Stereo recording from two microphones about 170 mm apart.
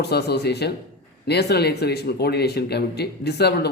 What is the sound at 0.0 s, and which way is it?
Speech, 75° left (ahead or behind).